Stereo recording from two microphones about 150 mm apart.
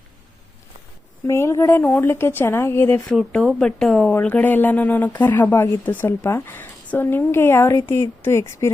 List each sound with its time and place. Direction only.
1.3 s speech: 20° left (ahead or behind)
3.2 s speech: centre (ahead or behind); by 8.7 s 20° left (ahead or behind)